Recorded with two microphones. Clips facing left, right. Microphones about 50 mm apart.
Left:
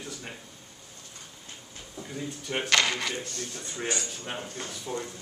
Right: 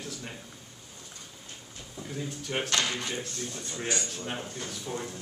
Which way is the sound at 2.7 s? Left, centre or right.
Left.